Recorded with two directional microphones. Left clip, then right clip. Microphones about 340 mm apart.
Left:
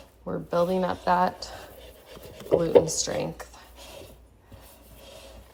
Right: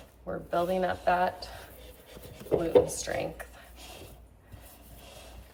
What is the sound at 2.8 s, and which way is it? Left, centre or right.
Speech, centre.